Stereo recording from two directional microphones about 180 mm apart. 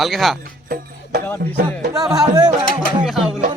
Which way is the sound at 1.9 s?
20° right (ahead or behind).